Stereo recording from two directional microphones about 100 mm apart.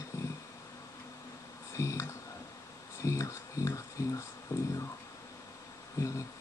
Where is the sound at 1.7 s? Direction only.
30° left (ahead or behind).